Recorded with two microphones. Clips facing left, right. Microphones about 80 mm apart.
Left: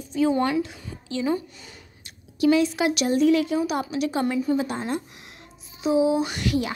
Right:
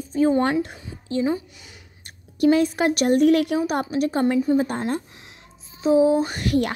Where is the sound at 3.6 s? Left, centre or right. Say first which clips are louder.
Right 2 dB; right.